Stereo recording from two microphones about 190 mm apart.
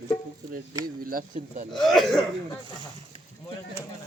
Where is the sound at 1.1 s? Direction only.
45° right (ahead or behind).